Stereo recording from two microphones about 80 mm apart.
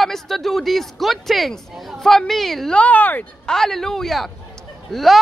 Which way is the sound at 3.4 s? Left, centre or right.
Centre.